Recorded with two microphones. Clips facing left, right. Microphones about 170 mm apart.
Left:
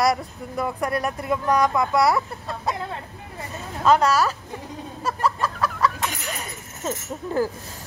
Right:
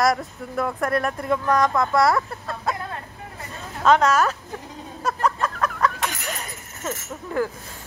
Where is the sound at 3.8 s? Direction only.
10° left (ahead or behind).